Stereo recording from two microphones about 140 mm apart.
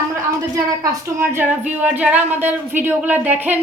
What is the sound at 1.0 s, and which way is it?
Speech, 15° right (ahead or behind).